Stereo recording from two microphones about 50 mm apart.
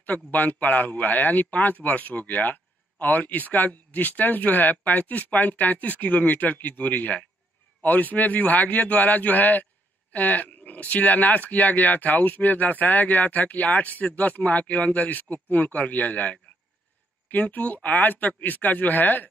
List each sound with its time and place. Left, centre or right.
0.0 s speech: left